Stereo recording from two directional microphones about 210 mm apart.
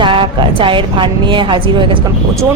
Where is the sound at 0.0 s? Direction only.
25° right (ahead or behind).